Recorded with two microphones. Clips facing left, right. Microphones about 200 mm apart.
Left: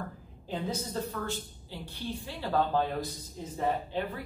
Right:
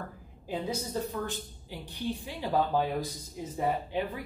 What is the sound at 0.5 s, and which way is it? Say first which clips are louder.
Speech: right 1 dB; 15° right (ahead or behind).